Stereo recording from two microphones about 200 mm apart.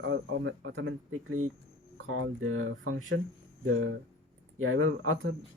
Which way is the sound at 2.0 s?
85° right.